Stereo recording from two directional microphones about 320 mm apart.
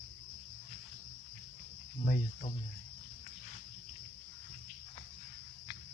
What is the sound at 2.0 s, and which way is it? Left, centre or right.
Cricket, left.